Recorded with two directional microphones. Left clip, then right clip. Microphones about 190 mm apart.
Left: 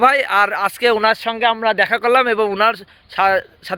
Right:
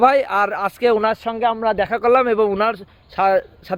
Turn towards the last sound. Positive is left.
turn(degrees=-5)  # may be behind; listen again after turning